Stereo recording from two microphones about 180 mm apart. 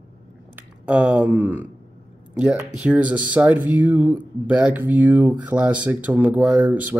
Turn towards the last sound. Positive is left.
turn(degrees=-10)  # may be behind; listen again after turning